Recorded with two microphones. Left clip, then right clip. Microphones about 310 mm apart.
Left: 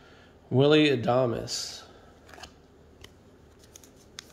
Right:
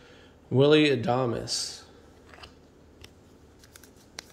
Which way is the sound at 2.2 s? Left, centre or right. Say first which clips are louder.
Left 2 dB; left.